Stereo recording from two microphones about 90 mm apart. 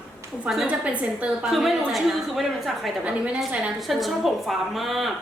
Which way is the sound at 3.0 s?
10° right (ahead or behind).